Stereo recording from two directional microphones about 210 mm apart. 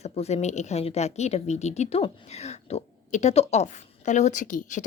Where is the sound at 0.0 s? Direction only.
30° left (ahead or behind).